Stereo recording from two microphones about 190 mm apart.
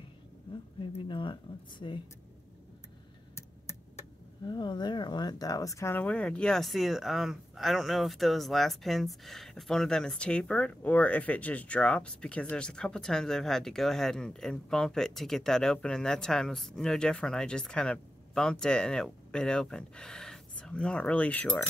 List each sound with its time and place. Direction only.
0.9 s speech: 25° left (ahead or behind)
3.3 s a sound: 15° left (ahead or behind)
4.5 s speech: 25° left (ahead or behind); by 21.6 s 5° left (ahead or behind)